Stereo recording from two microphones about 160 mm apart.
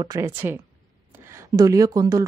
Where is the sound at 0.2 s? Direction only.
15° right (ahead or behind).